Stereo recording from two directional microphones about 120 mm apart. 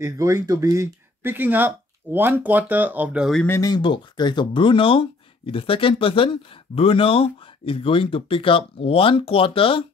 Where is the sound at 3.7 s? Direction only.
45° left (ahead or behind).